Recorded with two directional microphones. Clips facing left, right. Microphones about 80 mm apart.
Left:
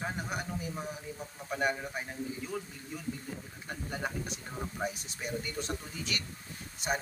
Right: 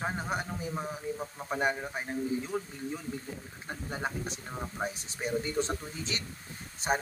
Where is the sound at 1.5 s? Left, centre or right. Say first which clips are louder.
Right 1 dB; right.